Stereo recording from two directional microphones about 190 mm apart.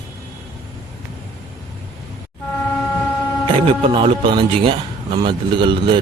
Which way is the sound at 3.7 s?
30° right (ahead or behind).